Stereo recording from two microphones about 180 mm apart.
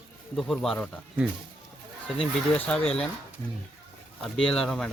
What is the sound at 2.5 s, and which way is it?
Speech, 5° left (ahead or behind).